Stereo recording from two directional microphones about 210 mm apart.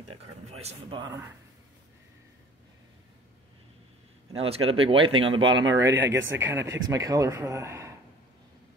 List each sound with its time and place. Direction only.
0.1 s speech: 30° right (ahead or behind)
4.4 s speech: 25° right (ahead or behind)
5.8 s a man's voice: 10° right (ahead or behind)